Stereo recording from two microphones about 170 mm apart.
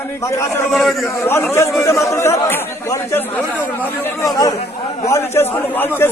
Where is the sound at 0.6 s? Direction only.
Centre (ahead or behind).